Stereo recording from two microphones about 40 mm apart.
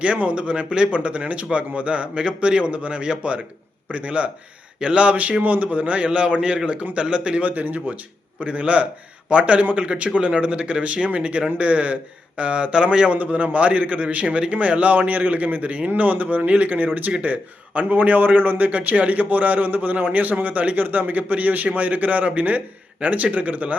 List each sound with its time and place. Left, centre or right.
0.0 s a man's voice: right
7.4 s a man's voice: right
13.1 s a man's voice: right